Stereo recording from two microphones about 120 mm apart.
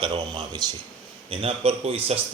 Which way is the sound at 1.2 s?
55° right (ahead or behind).